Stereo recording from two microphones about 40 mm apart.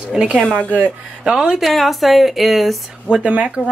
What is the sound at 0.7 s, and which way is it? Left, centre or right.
Speech, right.